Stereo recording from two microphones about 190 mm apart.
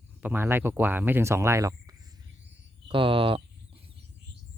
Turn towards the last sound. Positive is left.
turn(degrees=-25)  # may be behind; listen again after turning